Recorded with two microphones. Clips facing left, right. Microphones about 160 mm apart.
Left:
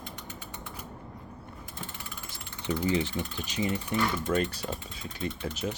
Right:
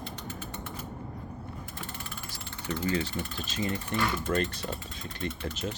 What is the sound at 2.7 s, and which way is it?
Speech, 15° left (ahead or behind).